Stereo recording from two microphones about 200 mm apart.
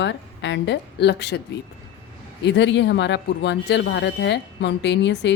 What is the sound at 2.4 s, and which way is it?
Speech, 65° left (ahead or behind).